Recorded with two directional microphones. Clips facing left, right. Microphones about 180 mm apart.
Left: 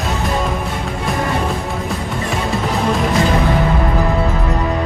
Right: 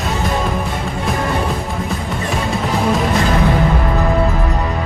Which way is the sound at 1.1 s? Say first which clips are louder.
Even; centre (ahead or behind).